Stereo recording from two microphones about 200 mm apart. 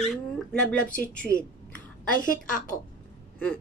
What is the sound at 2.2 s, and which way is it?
Speech, 40° left (ahead or behind).